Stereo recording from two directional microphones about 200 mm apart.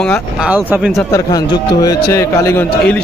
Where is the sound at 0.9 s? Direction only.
15° left (ahead or behind).